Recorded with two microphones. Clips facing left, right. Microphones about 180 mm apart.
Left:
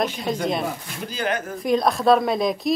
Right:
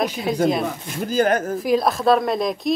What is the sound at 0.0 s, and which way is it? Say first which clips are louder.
Speech: right 4 dB; centre (ahead or behind).